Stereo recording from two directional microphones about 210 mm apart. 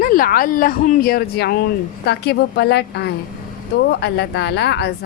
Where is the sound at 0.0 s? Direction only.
40° left (ahead or behind).